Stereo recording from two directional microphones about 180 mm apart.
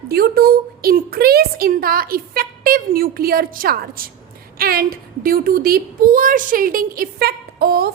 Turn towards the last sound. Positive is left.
turn(degrees=-60)  # may be behind; listen again after turning